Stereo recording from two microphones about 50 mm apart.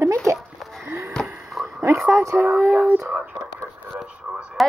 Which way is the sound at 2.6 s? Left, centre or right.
Right.